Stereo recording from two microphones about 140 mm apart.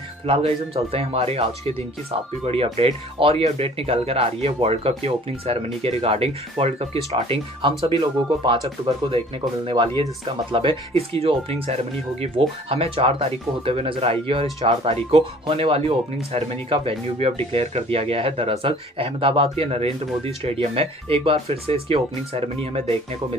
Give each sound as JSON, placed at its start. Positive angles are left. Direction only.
{"t": 0.3, "sound": "speech", "side_deg": -45}